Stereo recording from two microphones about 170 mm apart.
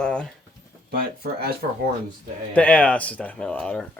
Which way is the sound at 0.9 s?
65° right (ahead or behind).